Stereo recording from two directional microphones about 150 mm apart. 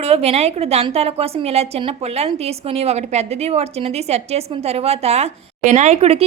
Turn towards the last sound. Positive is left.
turn(degrees=-45)  # may be behind; listen again after turning